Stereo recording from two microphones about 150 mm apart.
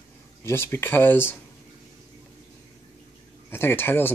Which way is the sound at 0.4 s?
15° left (ahead or behind).